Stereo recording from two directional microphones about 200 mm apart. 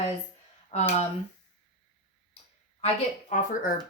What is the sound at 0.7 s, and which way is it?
Speech, 35° left (ahead or behind).